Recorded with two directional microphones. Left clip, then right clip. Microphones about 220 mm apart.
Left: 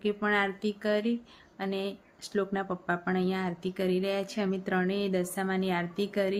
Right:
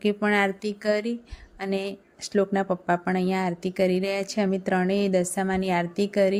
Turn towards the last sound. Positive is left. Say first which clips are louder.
# right 7 dB
turn(degrees=-25)  # may be behind; listen again after turning